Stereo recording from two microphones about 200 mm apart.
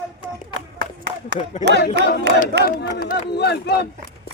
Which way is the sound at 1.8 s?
55° left (ahead or behind).